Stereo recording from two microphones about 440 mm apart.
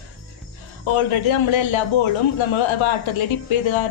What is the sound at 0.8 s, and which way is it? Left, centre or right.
A man's voice, left.